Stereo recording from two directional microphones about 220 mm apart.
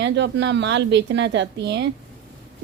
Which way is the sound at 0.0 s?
55° right (ahead or behind).